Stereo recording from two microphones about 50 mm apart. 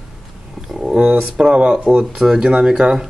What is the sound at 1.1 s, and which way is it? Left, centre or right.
Speech, right.